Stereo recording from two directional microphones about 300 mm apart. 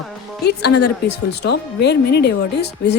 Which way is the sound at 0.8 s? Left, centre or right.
Left.